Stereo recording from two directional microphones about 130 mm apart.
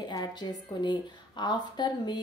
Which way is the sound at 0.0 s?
35° left (ahead or behind).